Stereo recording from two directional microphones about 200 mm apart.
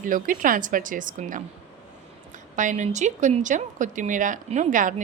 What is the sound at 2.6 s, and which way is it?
A woman's voice, 40° right (ahead or behind).